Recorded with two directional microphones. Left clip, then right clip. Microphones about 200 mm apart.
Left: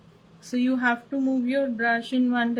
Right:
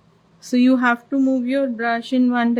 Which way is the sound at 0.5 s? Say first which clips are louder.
Right 7 dB; 55° right (ahead or behind).